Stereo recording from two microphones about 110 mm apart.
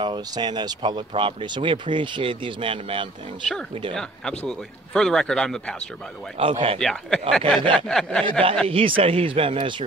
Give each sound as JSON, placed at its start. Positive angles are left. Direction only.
{"t": 0.0, "sound": "speech", "side_deg": -40}
{"t": 3.9, "sound": "speech", "side_deg": 5}
{"t": 6.3, "sound": "speech", "side_deg": -60}
{"t": 6.8, "sound": "speech", "side_deg": 5}
{"t": 7.7, "sound": "a sound", "side_deg": 5}
{"t": 8.6, "sound": "speech", "side_deg": -55}